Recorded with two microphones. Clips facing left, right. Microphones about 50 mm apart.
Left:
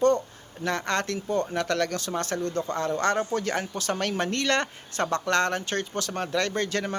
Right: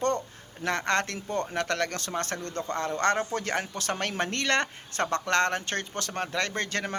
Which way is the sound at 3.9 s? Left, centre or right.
Right.